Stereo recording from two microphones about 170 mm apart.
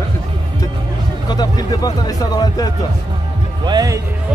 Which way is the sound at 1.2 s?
25° left (ahead or behind).